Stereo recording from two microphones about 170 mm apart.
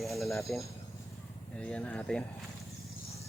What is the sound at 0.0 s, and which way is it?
Speech, centre (ahead or behind).